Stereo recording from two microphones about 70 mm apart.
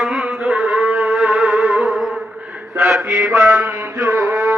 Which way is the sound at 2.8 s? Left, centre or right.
Centre.